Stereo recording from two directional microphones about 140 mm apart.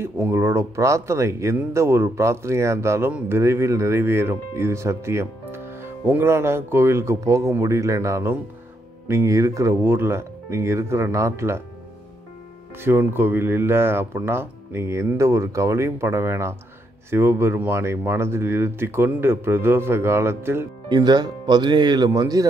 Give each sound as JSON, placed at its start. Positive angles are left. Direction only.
{"t": 0.0, "sound": "speech", "side_deg": -15}
{"t": 12.8, "sound": "speech", "side_deg": -15}
{"t": 20.9, "sound": "speech", "side_deg": -30}